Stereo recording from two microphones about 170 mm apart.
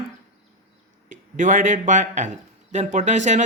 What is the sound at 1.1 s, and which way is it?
Speech, 50° right (ahead or behind).